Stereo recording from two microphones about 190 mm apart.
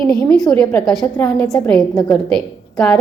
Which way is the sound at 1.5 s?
20° left (ahead or behind).